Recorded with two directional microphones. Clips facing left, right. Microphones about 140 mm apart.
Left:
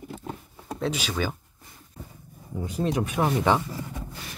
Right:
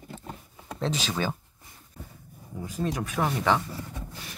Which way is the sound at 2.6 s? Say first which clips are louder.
Left 4 dB; 25° left (ahead or behind).